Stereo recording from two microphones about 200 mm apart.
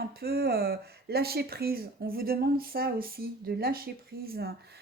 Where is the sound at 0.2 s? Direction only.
50° right (ahead or behind).